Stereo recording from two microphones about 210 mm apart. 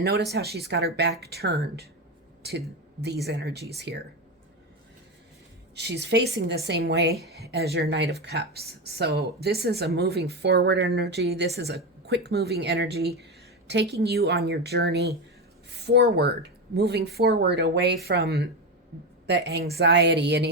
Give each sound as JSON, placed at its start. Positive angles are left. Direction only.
{"t": 0.0, "sound": "speech", "side_deg": -50}
{"t": 5.7, "sound": "a woman's voice", "side_deg": -55}